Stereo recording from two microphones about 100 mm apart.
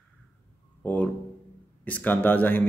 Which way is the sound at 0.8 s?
15° left (ahead or behind).